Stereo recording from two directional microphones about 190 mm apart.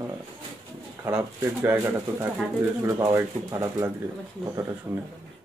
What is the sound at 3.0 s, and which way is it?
Speech, 15° right (ahead or behind).